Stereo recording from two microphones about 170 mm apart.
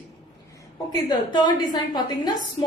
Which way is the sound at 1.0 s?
25° left (ahead or behind).